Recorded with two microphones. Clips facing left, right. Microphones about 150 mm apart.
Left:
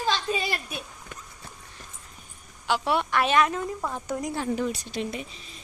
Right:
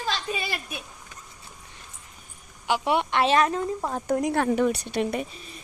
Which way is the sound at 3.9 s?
50° right (ahead or behind).